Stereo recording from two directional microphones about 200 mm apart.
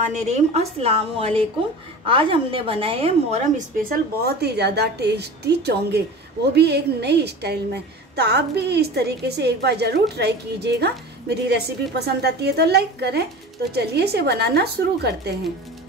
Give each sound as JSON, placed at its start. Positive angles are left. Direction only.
{"t": 0.1, "sound": "a woman's voice", "side_deg": -35}